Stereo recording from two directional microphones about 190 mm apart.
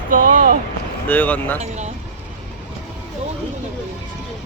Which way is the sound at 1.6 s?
35° right (ahead or behind).